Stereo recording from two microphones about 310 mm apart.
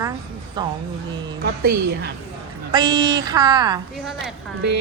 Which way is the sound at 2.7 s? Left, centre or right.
Centre.